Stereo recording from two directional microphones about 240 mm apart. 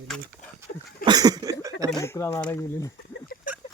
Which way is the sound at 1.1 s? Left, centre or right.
Centre.